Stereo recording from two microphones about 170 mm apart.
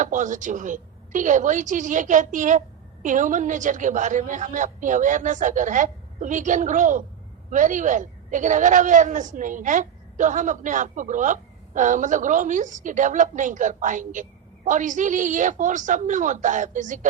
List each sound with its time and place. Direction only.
0.0 s a woman's voice: 50° right (ahead or behind)